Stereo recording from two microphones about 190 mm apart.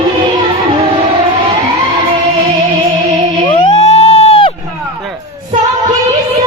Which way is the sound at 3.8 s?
35° left (ahead or behind).